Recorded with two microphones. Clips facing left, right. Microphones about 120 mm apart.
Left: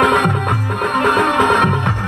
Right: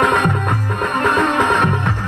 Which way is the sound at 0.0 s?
5° left (ahead or behind).